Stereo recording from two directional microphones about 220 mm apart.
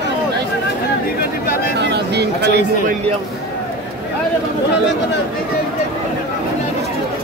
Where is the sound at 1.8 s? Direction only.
50° right (ahead or behind).